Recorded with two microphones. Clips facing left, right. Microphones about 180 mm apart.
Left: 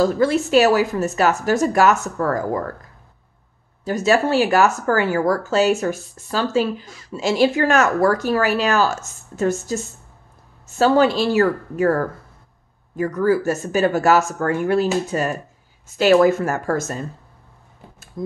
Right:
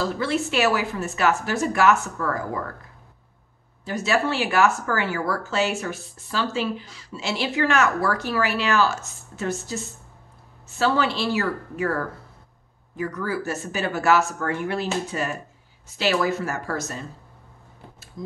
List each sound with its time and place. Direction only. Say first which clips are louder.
0.0 s speech: left 7 dB; 45° left (ahead or behind)
3.8 s speech: left 6 dB; 40° left (ahead or behind)
18.2 s speech: left 8 dB; 55° left (ahead or behind)